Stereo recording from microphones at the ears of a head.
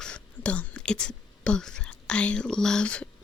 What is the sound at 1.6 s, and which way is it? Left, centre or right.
Whispering, left.